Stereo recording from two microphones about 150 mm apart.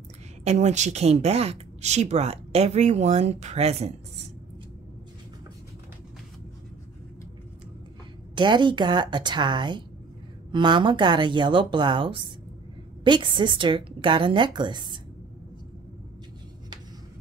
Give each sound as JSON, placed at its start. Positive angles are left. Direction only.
{"t": 0.4, "sound": "a woman's voice", "side_deg": -50}
{"t": 8.4, "sound": "a woman's voice", "side_deg": -30}